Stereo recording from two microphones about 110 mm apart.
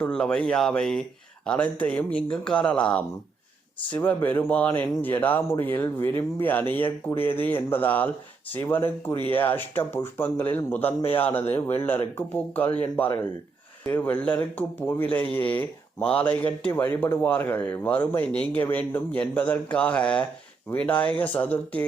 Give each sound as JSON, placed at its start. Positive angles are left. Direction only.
{"t": 0.0, "sound": "speech", "side_deg": 10}